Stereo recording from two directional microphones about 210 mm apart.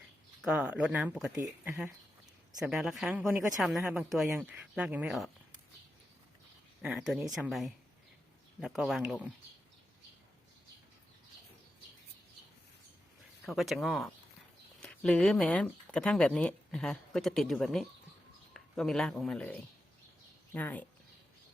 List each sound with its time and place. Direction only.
0.4 s speech: 5° right (ahead or behind)
6.8 s speech: 5° right (ahead or behind)
13.4 s speech: centre (ahead or behind)